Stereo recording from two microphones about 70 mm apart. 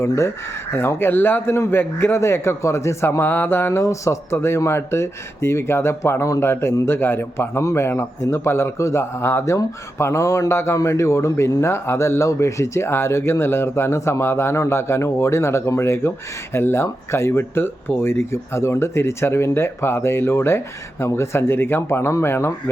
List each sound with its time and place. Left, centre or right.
0.7 s a man's voice: left